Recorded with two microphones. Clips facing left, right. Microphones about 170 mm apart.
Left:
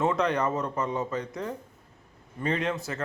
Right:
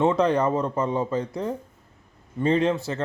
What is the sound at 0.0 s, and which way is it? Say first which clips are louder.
A man's voice: right 5 dB; 30° right (ahead or behind).